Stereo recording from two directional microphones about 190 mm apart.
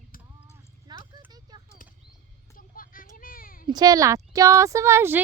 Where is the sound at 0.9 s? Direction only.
20° right (ahead or behind).